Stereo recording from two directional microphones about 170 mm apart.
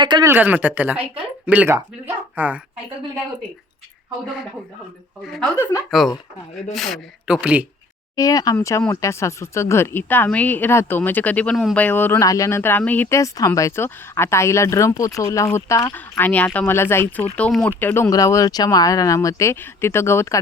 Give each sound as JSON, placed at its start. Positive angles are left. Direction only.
{"t": 0.0, "sound": "speech", "side_deg": -25}
{"t": 0.3, "sound": "speech", "side_deg": -10}
{"t": 6.0, "sound": "speech", "side_deg": 0}
{"t": 8.1, "sound": "speech", "side_deg": 20}